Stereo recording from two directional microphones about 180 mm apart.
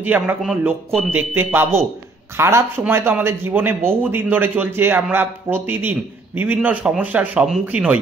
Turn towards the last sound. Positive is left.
turn(degrees=-10)  # may be behind; listen again after turning